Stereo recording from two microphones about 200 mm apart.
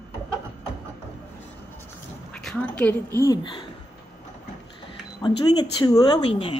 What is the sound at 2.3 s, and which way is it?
A woman's voice, 5° left (ahead or behind).